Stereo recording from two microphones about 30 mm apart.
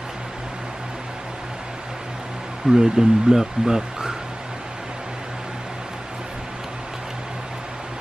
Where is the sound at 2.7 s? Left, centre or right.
Right.